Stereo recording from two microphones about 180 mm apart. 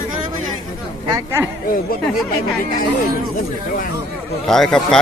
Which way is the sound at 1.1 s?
15° right (ahead or behind).